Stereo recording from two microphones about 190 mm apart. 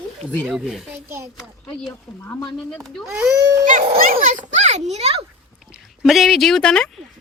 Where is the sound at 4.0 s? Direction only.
45° right (ahead or behind).